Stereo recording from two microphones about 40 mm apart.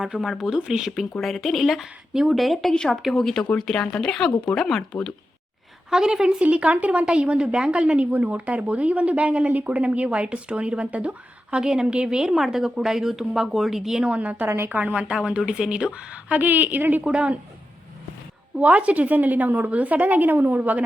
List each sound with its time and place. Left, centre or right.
0.2 s speech: centre
1.1 s speech: centre
2.7 s speech: centre
3.1 s speech: centre
5.9 s speech: centre
6.4 s speech: right
7.0 s a woman's voice: right
11.5 s a woman's voice: centre
14.0 s speech: right
15.1 s a woman's voice: right
16.4 s a woman's voice: right
17.0 s a woman's voice: right
18.6 s a woman's voice: right